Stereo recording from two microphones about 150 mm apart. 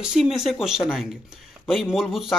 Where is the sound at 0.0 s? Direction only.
5° right (ahead or behind).